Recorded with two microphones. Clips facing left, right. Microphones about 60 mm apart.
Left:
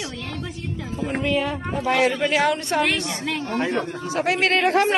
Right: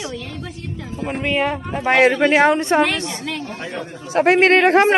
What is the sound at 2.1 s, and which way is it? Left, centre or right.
Speech, right.